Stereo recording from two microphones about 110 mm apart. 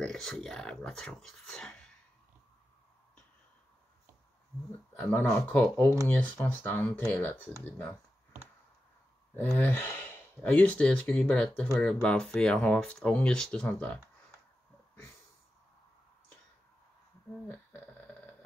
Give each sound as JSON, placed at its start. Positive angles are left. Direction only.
{"t": 0.0, "sound": "speech", "side_deg": 5}
{"t": 4.9, "sound": "speech", "side_deg": 15}
{"t": 9.3, "sound": "speech", "side_deg": 15}